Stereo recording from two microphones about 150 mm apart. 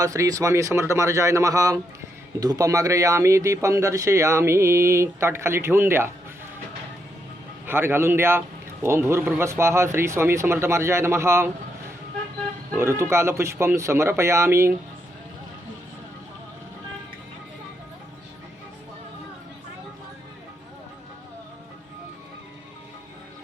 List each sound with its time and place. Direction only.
0.0 s speech: 20° right (ahead or behind)
7.7 s speech: 15° right (ahead or behind)
12.7 s speech: 15° right (ahead or behind)